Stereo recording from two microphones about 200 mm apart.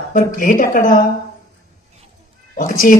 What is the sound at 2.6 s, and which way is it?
Speech, 40° left (ahead or behind).